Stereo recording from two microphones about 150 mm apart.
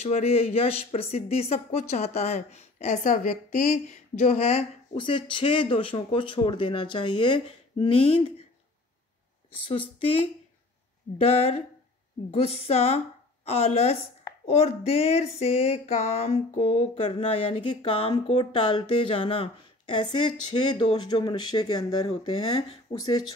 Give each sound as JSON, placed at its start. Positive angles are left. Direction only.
{"t": 0.0, "sound": "speech", "side_deg": 45}
{"t": 11.2, "sound": "speech", "side_deg": 40}
{"t": 12.4, "sound": "a sound", "side_deg": 40}
{"t": 16.2, "sound": "speech", "side_deg": 50}